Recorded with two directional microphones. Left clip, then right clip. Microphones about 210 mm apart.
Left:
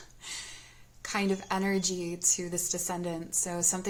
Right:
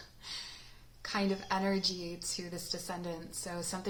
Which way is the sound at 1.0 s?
30° left (ahead or behind).